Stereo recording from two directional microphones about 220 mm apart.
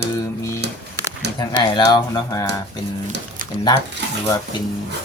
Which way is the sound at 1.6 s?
20° left (ahead or behind).